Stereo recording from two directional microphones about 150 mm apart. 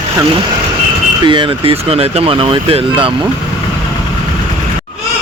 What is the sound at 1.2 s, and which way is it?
Speech, 35° right (ahead or behind).